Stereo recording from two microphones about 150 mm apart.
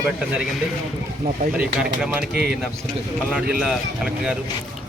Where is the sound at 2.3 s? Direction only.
90° right.